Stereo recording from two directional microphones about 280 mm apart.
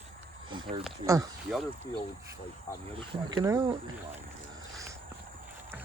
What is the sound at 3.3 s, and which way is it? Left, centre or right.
Speech, centre.